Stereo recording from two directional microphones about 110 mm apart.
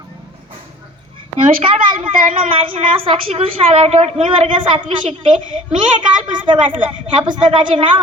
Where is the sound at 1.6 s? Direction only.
55° right (ahead or behind); by 4.3 s 70° right (ahead or behind).